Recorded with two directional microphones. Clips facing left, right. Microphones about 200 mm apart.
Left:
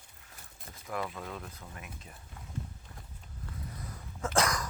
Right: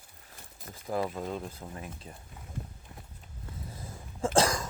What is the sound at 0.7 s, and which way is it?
Speech, 30° right (ahead or behind).